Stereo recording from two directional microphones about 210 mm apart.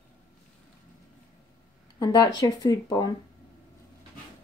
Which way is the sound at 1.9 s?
20° left (ahead or behind).